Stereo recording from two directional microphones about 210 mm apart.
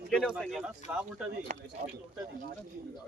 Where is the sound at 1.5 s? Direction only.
35° right (ahead or behind).